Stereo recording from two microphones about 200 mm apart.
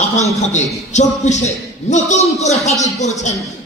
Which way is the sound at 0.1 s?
35° left (ahead or behind).